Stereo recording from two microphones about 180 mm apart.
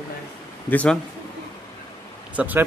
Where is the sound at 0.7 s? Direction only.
10° left (ahead or behind).